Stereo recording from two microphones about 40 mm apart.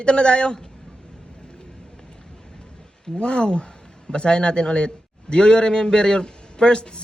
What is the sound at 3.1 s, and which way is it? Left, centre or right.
A man's voice, left.